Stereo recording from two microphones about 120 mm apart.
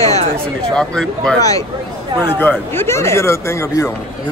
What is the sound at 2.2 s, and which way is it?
Speech, 15° left (ahead or behind).